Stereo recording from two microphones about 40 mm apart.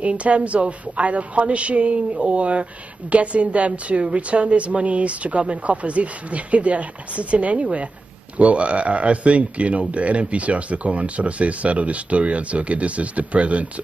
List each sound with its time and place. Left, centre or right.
0.0 s speech: right